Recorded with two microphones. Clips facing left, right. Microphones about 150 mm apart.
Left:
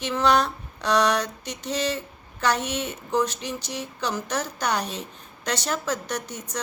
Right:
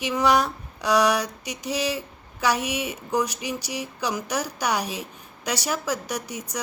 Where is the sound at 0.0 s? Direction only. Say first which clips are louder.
Even; 10° right (ahead or behind).